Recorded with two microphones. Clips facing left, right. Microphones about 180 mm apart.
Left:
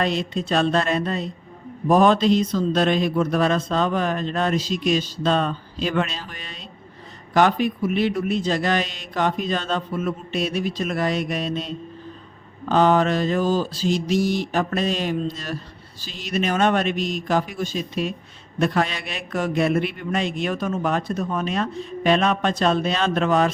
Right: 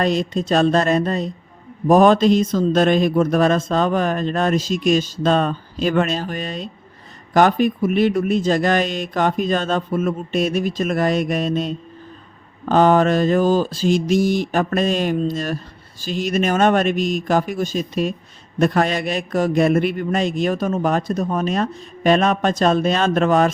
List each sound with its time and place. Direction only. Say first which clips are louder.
0.0 s a man's voice: right 4 dB; 45° right (ahead or behind)